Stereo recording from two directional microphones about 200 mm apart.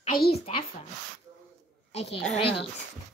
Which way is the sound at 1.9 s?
30° left (ahead or behind).